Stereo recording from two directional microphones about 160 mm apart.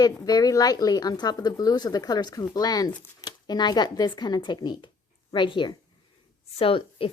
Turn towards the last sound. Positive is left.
turn(degrees=35)  # may be behind; listen again after turning